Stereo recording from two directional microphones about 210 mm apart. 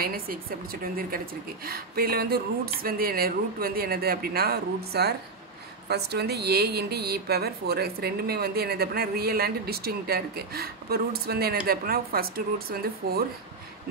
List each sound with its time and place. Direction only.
0.0 s speech: 45° right (ahead or behind)